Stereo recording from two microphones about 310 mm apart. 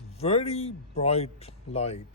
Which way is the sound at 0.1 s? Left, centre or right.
Centre.